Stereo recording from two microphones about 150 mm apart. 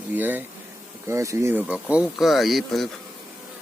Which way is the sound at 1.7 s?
10° right (ahead or behind).